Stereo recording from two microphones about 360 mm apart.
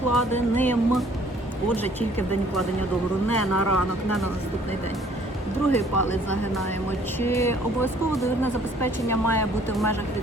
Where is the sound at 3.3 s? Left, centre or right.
Left.